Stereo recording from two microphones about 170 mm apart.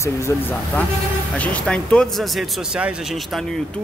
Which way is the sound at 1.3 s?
5° left (ahead or behind).